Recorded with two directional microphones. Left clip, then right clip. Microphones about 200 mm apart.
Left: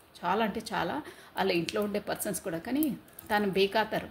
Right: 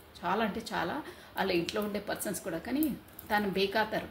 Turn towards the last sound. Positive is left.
turn(degrees=50)  # may be behind; listen again after turning